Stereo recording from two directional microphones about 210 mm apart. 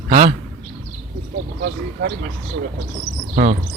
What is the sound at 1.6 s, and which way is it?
Speech, 50° right (ahead or behind).